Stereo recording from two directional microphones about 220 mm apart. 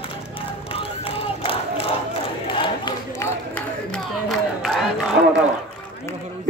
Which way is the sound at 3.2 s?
5° left (ahead or behind).